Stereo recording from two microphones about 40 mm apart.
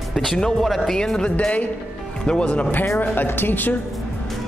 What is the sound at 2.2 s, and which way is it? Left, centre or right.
Speech, left.